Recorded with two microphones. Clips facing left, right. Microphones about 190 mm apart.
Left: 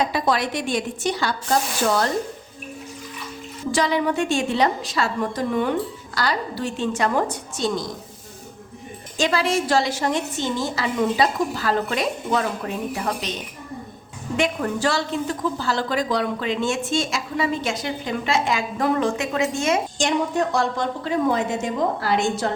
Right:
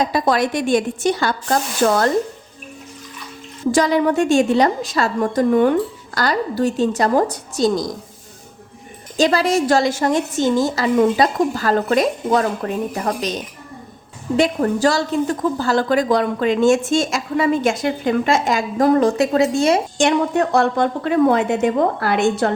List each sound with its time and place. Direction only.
0.0 s a woman's voice: 45° right (ahead or behind)
3.7 s a woman's voice: 45° right (ahead or behind)
9.1 s a woman's voice: 40° right (ahead or behind)
14.3 s a woman's voice: 35° right (ahead or behind)
20.0 s a woman's voice: 60° right (ahead or behind)